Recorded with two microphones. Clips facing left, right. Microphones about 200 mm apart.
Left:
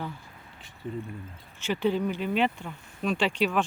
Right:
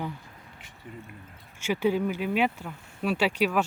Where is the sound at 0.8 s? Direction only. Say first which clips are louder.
Left 9 dB; 35° left (ahead or behind).